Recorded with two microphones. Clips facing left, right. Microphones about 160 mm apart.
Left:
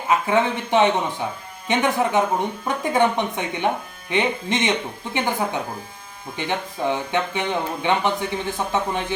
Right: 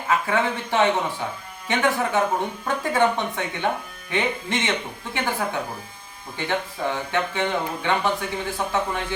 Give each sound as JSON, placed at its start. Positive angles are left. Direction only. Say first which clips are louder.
{"t": 0.1, "sound": "speech", "louder": "left 3 dB", "side_deg": 20}